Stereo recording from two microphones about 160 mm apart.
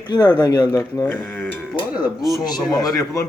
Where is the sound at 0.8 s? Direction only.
10° left (ahead or behind).